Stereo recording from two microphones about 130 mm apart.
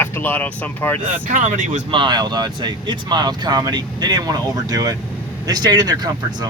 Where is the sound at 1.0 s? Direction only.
75° right (ahead or behind).